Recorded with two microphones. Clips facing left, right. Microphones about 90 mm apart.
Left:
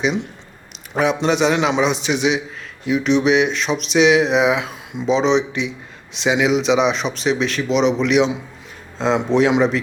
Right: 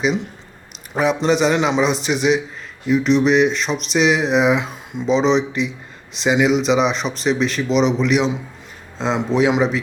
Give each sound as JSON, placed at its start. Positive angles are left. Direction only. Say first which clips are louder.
{"t": 0.0, "sound": "speech", "louder": "right 1 dB", "side_deg": 0}